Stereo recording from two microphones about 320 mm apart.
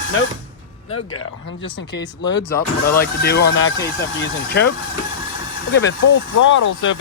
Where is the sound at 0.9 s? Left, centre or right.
Left.